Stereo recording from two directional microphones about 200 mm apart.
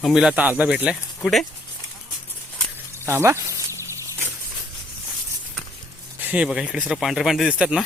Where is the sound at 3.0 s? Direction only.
10° right (ahead or behind).